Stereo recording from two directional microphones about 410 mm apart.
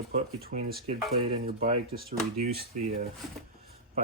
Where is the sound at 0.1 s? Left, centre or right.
Centre.